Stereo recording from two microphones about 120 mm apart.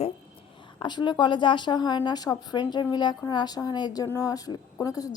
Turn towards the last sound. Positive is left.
turn(degrees=30)  # may be behind; listen again after turning